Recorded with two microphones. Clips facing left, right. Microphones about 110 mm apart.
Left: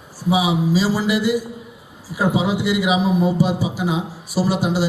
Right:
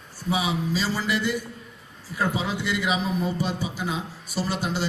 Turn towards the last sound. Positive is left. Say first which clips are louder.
# left 8 dB
turn(degrees=5)  # may be behind; listen again after turning